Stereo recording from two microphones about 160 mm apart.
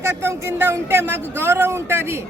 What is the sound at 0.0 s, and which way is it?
Speech, 15° right (ahead or behind).